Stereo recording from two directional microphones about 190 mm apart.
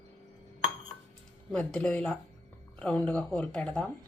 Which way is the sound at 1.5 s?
5° left (ahead or behind).